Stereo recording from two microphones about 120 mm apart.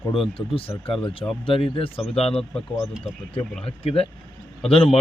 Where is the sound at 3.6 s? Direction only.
50° left (ahead or behind).